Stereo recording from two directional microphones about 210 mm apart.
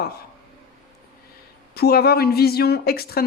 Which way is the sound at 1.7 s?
50° left (ahead or behind).